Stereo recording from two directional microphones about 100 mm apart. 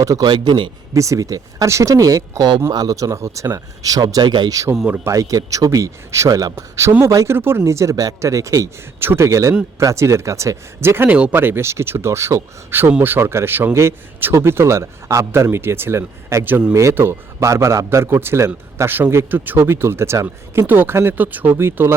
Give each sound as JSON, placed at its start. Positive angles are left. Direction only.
{"t": 0.0, "sound": "speech", "side_deg": -35}
{"t": 0.3, "sound": "a man's voice", "side_deg": -50}
{"t": 0.9, "sound": "speech", "side_deg": -30}
{"t": 4.7, "sound": "speech", "side_deg": -10}
{"t": 5.0, "sound": "a man's voice", "side_deg": -35}
{"t": 16.7, "sound": "a man's voice", "side_deg": -25}